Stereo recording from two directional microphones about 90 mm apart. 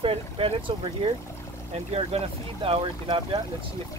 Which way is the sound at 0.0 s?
90° right.